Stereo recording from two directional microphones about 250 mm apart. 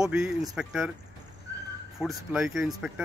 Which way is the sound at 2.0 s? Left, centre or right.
Centre.